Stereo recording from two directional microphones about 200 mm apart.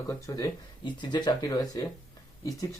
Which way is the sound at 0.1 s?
15° left (ahead or behind).